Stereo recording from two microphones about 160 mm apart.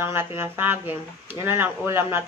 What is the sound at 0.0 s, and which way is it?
Speech, 15° right (ahead or behind).